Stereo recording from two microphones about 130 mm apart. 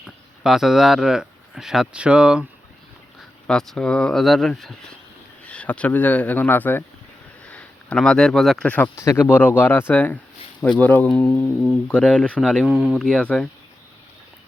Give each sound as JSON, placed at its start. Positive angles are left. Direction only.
{"t": 0.4, "sound": "speech", "side_deg": -5}
{"t": 3.4, "sound": "speech", "side_deg": 5}
{"t": 8.7, "sound": "speech", "side_deg": 15}